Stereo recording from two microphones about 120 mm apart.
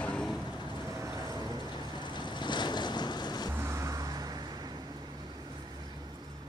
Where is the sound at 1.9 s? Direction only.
40° left (ahead or behind).